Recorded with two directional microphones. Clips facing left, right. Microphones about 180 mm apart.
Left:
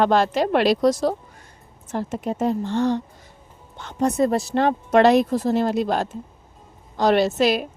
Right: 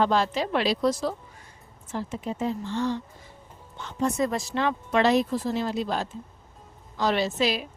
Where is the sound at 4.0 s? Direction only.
35° left (ahead or behind).